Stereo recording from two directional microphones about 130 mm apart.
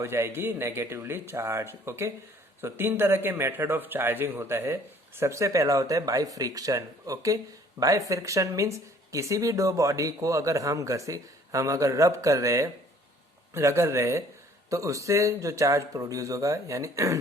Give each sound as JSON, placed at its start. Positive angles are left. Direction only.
{"t": 0.0, "sound": "speech", "side_deg": -20}